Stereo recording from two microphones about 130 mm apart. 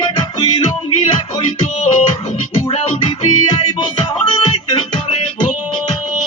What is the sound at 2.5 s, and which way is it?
Music, 45° left (ahead or behind).